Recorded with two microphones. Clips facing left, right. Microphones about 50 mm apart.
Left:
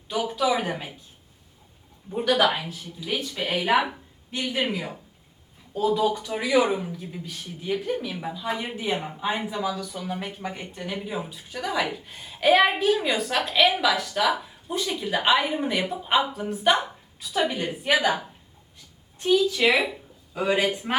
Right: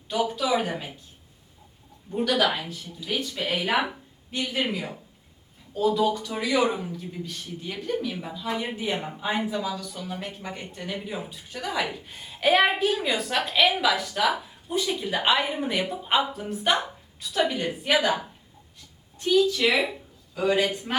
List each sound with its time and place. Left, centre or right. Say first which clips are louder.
0.1 s speech: even; centre
2.1 s a woman's voice: left 2 dB; centre
19.2 s a woman's voice: left 1 dB; centre